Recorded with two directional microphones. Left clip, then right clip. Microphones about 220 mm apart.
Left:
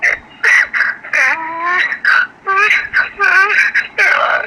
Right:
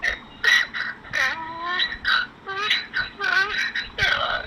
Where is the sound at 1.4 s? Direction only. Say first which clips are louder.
Left 11 dB; 30° left (ahead or behind).